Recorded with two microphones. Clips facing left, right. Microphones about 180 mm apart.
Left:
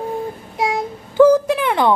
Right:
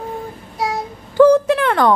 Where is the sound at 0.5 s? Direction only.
20° left (ahead or behind).